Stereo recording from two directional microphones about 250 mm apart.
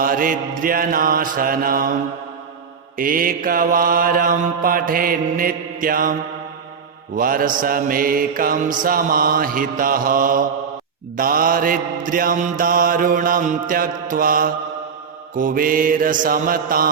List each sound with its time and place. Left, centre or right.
0.0 s mantra: right
3.0 s mantra: right
7.2 s mantra: right